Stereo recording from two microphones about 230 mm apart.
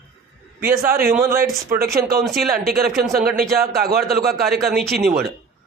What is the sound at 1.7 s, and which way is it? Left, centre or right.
Speech, right.